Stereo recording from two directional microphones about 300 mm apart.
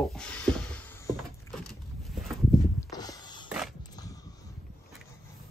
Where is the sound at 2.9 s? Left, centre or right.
Centre.